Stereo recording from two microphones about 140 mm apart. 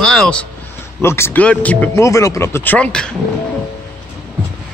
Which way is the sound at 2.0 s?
20° left (ahead or behind).